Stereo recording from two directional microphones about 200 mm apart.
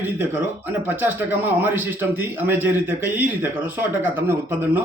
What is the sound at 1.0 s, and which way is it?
A man's voice, 10° right (ahead or behind).